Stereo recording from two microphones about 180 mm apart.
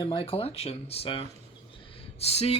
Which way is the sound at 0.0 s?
30° left (ahead or behind).